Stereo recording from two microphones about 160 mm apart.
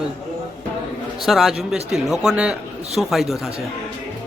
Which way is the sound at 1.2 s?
Centre (ahead or behind).